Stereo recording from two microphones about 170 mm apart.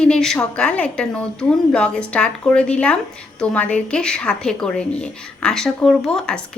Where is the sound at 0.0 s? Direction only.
5° left (ahead or behind).